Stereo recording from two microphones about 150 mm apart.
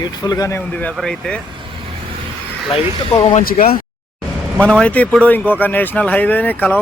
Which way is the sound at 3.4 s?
75° left (ahead or behind).